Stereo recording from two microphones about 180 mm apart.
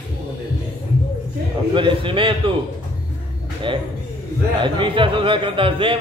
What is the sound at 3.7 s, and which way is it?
A man's voice, 30° right (ahead or behind).